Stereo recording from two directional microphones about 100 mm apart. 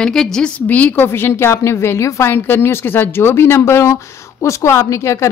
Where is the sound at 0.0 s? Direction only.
5° left (ahead or behind).